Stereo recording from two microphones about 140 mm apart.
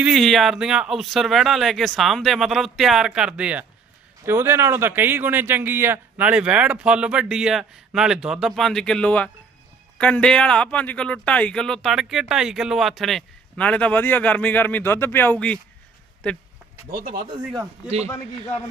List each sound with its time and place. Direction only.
0.0 s a man's voice: centre (ahead or behind)
16.9 s speech: 90° right
17.2 s speech: 35° right (ahead or behind)